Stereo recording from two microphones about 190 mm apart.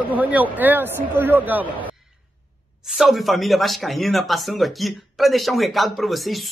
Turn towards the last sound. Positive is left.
turn(degrees=0)  # may be behind; listen again after turning